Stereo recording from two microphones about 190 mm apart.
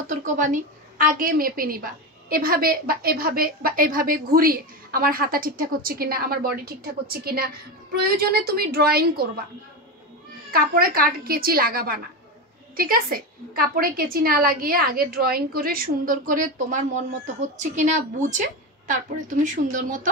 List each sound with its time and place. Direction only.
0.1 s a woman's voice: 40° right (ahead or behind)
10.5 s a woman's voice: 50° right (ahead or behind)